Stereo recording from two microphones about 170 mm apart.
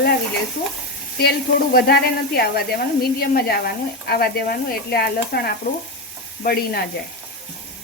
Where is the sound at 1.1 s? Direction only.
70° left (ahead or behind).